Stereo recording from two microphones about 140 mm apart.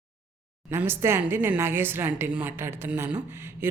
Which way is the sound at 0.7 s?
15° right (ahead or behind).